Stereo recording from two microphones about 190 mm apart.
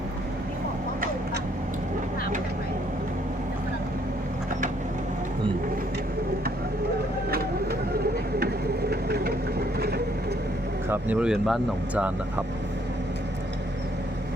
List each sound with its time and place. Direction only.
8.9 s vehicle: 55° right (ahead or behind)
10.8 s speech: 10° right (ahead or behind)